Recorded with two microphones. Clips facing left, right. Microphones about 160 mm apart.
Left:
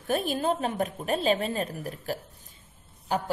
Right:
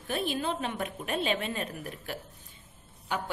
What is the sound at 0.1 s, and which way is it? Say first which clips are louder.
A woman's voice: left 5 dB; 45° left (ahead or behind).